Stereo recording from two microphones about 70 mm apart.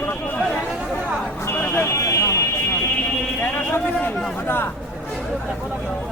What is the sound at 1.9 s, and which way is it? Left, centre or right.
Fire alarm, left.